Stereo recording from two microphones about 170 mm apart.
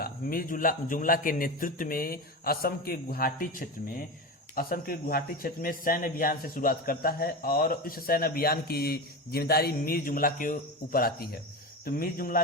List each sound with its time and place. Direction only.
0.0 s speech: 55° left (ahead or behind)